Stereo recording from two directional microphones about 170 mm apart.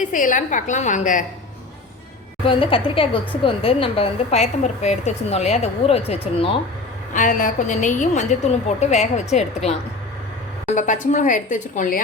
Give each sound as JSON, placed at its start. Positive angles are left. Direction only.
{"t": 0.0, "sound": "a woman's voice", "side_deg": 50}
{"t": 2.4, "sound": "a woman's voice", "side_deg": 30}
{"t": 7.1, "sound": "a woman's voice", "side_deg": 50}
{"t": 10.8, "sound": "a woman's voice", "side_deg": 45}